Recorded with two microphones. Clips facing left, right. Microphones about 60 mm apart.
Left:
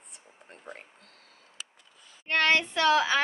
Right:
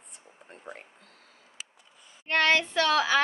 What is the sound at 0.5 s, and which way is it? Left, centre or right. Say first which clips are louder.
Music: right 1 dB; centre.